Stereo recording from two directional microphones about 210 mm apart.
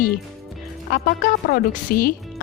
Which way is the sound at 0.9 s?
45° left (ahead or behind).